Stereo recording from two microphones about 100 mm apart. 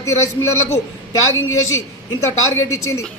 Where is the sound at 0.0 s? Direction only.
30° left (ahead or behind).